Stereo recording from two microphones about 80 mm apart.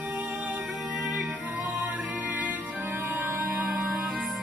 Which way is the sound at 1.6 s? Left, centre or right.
Centre.